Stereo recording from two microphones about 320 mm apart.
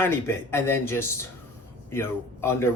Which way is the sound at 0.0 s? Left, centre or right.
Centre.